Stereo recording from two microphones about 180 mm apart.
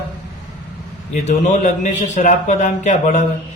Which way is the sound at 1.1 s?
40° left (ahead or behind).